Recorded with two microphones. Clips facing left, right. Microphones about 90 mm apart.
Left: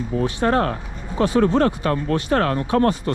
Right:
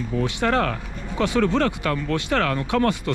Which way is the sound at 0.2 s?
25° left (ahead or behind).